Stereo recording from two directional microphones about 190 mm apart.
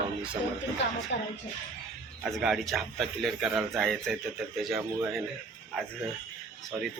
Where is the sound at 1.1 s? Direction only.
65° left (ahead or behind).